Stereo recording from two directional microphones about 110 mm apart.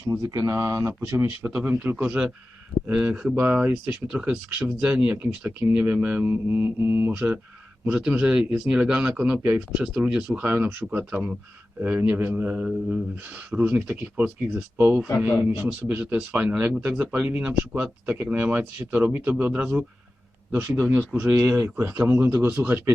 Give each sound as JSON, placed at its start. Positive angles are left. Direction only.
{"t": 0.1, "sound": "a man's voice", "side_deg": -30}
{"t": 20.5, "sound": "a man's voice", "side_deg": -20}